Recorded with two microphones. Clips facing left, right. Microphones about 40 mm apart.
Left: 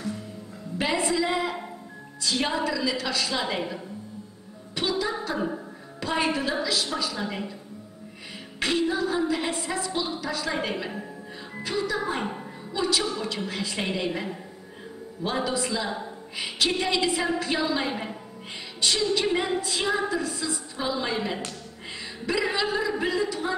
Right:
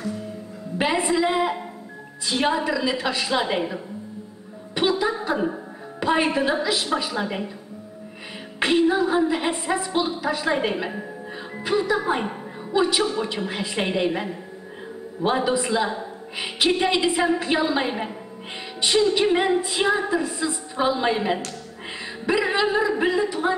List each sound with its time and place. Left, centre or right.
0.9 s a woman's voice: centre
8.5 s a woman's voice: right
22.0 s music: right
22.9 s a woman's voice: right